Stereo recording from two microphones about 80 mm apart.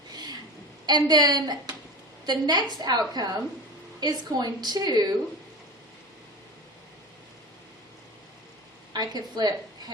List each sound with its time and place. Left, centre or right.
0.1 s a sound: right
0.9 s a woman's voice: right
8.9 s a woman's voice: right